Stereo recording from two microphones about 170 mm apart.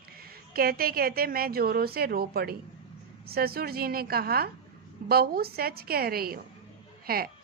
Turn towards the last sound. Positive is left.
turn(degrees=-60)  # may be behind; listen again after turning